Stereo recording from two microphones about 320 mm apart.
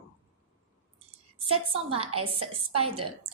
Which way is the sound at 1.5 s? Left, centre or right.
Centre.